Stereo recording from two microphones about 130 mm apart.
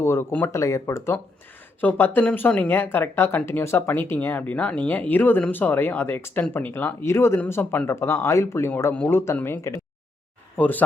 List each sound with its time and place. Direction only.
0.0 s speech: 20° left (ahead or behind)